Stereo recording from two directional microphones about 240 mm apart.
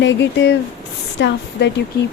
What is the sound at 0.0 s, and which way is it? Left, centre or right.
Speech, left.